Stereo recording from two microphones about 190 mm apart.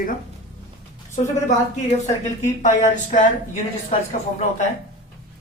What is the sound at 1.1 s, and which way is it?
Speech, 40° left (ahead or behind).